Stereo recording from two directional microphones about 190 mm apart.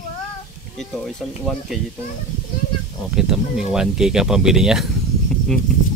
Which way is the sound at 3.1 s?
5° right (ahead or behind).